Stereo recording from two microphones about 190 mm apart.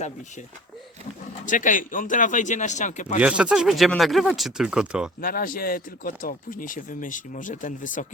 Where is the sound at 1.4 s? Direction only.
45° left (ahead or behind).